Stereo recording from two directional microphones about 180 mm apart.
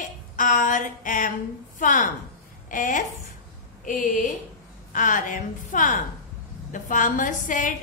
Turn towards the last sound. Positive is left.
turn(degrees=45)  # may be behind; listen again after turning